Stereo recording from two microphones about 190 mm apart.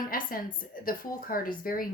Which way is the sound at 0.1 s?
50° left (ahead or behind).